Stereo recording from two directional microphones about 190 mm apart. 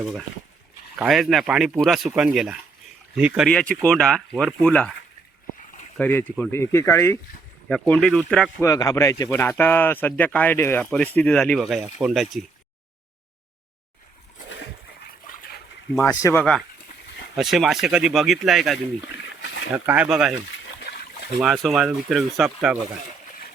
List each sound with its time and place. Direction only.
0.0 s speech: 5° right (ahead or behind)
6.0 s speech: 10° left (ahead or behind)
8.6 s speech: 15° left (ahead or behind); by 12.5 s centre (ahead or behind)
16.0 s speech: 15° left (ahead or behind)
16.4 s speech: 5° left (ahead or behind)
21.3 s speech: centre (ahead or behind)